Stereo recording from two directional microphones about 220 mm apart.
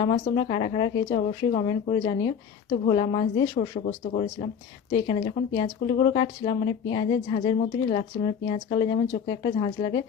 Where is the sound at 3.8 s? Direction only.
35° left (ahead or behind).